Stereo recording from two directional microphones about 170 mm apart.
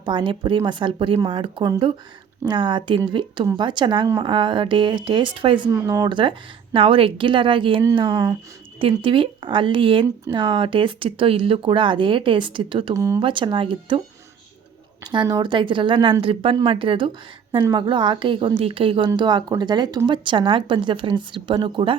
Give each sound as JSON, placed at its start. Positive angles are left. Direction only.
{"t": 0.0, "sound": "a woman's voice", "side_deg": -25}
{"t": 13.2, "sound": "a woman's voice", "side_deg": -30}
{"t": 15.0, "sound": "a woman's voice", "side_deg": -25}